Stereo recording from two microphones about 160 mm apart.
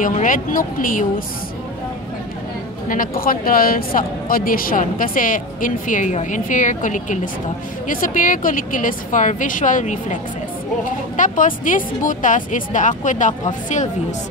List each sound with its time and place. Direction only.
0.0 s speech: 55° left (ahead or behind)
2.9 s speech: 60° left (ahead or behind)
11.1 s speech: 55° left (ahead or behind)